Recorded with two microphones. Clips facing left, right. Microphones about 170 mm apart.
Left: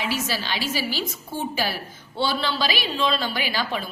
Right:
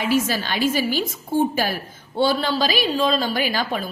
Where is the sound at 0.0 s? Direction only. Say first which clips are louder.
Right 6 dB; 50° right (ahead or behind).